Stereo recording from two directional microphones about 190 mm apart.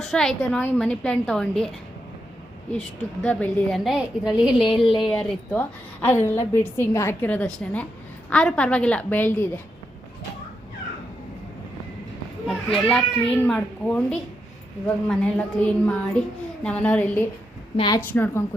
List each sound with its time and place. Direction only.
0.0 s a child's voice: centre (ahead or behind)
3.2 s a woman's voice: 5° left (ahead or behind)
12.5 s a child's voice: 5° left (ahead or behind)
17.7 s a woman's voice: 20° left (ahead or behind)
18.1 s a woman's voice: 10° left (ahead or behind)